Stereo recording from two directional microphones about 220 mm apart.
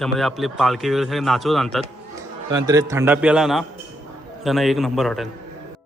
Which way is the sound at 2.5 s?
15° right (ahead or behind).